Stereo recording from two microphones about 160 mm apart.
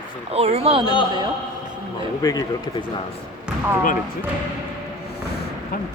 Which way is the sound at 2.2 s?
20° left (ahead or behind).